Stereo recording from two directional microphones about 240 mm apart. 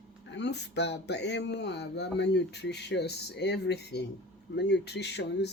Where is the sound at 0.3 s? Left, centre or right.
Left.